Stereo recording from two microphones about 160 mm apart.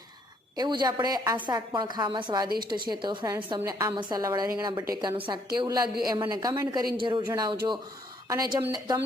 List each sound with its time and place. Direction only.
0.5 s a woman's voice: 25° right (ahead or behind)